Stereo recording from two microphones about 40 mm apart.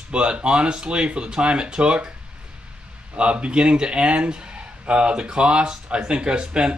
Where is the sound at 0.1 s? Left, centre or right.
Right.